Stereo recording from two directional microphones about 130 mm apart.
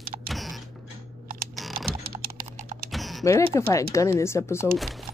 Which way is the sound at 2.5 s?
75° right (ahead or behind).